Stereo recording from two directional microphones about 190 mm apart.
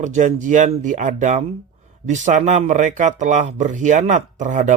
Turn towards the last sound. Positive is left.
turn(degrees=-40)  # may be behind; listen again after turning